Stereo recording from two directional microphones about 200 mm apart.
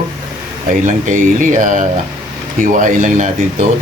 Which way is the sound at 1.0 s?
40° right (ahead or behind).